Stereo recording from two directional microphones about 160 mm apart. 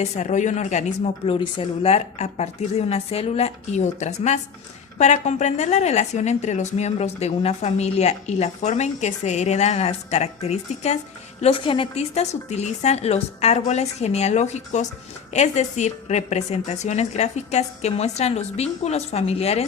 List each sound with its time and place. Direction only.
0.0 s a woman's voice: 45° left (ahead or behind)